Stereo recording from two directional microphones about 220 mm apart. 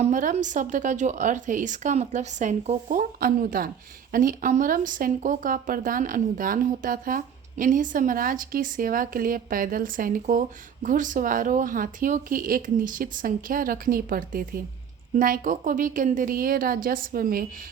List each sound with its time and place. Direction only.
0.0 s speech: 35° right (ahead or behind)